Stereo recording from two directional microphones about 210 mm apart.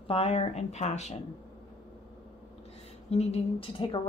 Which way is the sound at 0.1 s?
30° left (ahead or behind).